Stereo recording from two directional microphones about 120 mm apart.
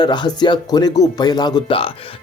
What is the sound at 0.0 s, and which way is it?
Speech, 40° left (ahead or behind).